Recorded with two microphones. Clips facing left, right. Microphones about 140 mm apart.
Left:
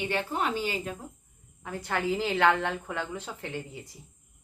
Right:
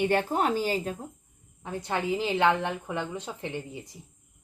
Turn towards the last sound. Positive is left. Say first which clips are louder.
# right 2 dB
turn(degrees=-20)  # may be behind; listen again after turning